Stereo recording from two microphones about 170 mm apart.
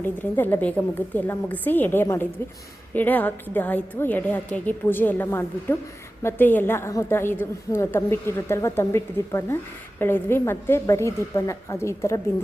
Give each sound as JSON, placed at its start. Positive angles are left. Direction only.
{"t": 0.0, "sound": "a woman's voice", "side_deg": 10}